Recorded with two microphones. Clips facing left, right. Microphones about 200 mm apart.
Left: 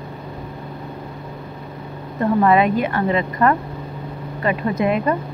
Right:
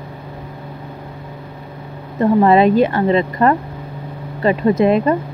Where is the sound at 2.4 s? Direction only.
30° right (ahead or behind).